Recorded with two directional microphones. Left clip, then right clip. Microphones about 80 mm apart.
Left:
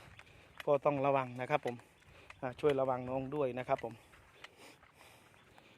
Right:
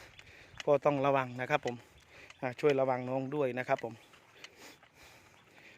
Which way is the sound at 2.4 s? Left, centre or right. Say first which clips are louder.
Right 3 dB; right.